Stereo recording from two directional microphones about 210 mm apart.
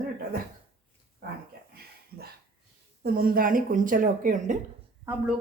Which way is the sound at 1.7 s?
45° right (ahead or behind).